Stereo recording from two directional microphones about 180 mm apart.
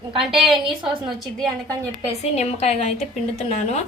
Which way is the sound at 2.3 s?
35° left (ahead or behind).